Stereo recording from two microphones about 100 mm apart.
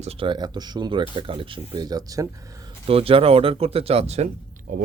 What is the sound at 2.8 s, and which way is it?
Speech, 75° right (ahead or behind).